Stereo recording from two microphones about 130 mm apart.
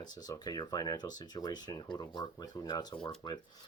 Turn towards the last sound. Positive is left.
turn(degrees=35)  # may be behind; listen again after turning